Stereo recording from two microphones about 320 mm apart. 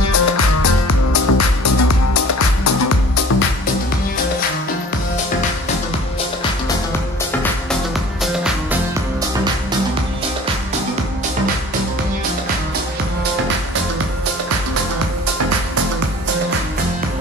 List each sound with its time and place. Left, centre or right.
0.0 s music: left